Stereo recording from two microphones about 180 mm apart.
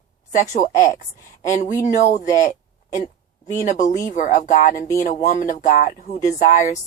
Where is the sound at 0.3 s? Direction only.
45° left (ahead or behind).